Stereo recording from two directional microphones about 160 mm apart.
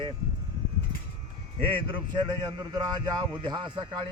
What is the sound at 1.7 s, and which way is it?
Speech, 30° right (ahead or behind).